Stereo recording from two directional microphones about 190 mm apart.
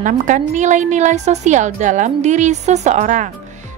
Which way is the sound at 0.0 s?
40° right (ahead or behind).